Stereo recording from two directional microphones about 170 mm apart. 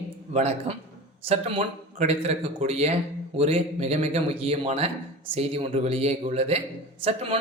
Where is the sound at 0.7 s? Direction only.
40° right (ahead or behind).